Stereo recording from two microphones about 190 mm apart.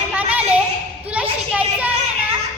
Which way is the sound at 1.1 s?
5° right (ahead or behind).